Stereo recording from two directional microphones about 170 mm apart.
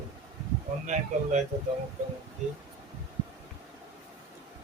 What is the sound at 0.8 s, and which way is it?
Speech, 45° right (ahead or behind).